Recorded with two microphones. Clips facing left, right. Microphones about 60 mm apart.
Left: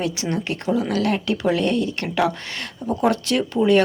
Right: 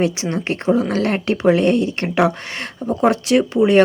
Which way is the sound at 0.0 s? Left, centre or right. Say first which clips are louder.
Right 4 dB; right.